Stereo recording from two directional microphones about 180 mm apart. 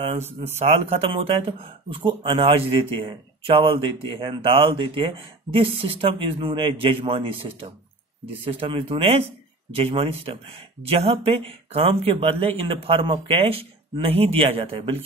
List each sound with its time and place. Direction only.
0.6 s speech: 35° right (ahead or behind)
8.5 s speech: 30° right (ahead or behind)